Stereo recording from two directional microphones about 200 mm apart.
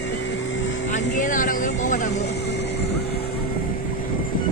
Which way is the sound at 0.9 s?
40° left (ahead or behind).